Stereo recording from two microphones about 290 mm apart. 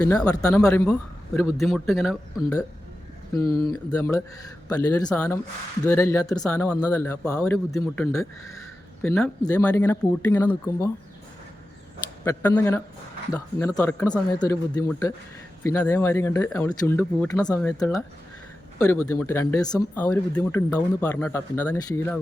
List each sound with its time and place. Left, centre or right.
0.0 s speech: centre
3.3 s speech: centre
12.2 s speech: centre
19.1 s speech: centre